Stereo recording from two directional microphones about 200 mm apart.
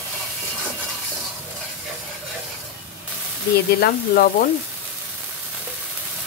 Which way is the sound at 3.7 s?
50° left (ahead or behind).